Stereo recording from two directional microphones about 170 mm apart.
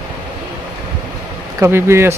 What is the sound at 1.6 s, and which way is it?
Speech, 15° right (ahead or behind).